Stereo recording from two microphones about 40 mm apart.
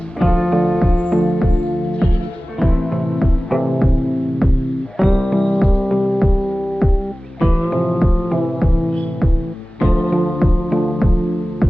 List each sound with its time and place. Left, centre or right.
0.2 s music: centre
0.9 s music: left
3.2 s music: centre
4.9 s music: centre
5.9 s music: centre
7.4 s music: centre
9.8 s music: centre